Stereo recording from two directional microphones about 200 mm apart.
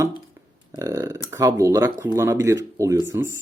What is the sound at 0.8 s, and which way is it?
Speech, 15° right (ahead or behind).